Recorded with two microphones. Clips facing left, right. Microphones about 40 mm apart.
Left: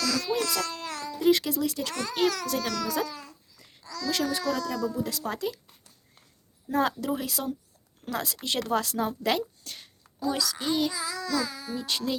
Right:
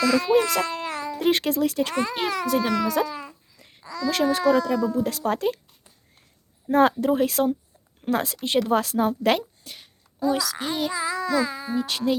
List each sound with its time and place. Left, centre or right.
0.0 s speech: right
0.6 s babbling: right
1.2 s speech: right
5.0 s speech: right
6.7 s speech: right
9.6 s a child's voice: centre